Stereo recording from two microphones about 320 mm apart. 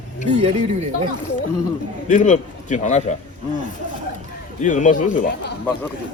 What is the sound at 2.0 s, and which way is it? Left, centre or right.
A man's voice, left.